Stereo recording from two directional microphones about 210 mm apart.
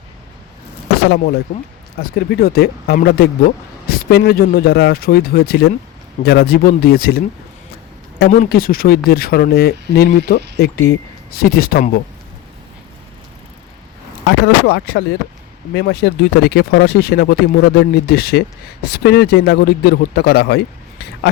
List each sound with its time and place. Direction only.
1.5 s speech: 50° left (ahead or behind)
14.3 s speech: 55° left (ahead or behind)